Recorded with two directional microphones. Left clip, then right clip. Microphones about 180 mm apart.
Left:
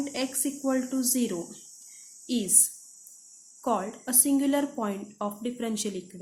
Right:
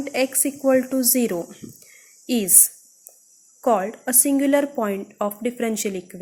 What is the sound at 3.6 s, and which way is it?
A woman's voice, 30° right (ahead or behind).